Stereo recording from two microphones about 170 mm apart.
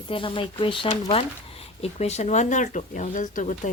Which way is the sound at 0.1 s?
30° left (ahead or behind).